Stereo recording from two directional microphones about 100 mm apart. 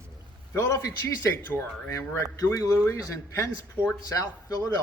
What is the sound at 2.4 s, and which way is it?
A man's voice, 35° left (ahead or behind).